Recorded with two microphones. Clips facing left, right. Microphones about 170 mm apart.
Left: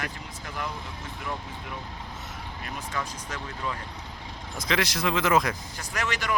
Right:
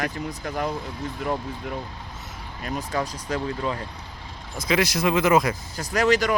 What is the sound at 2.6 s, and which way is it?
Speech, 35° right (ahead or behind).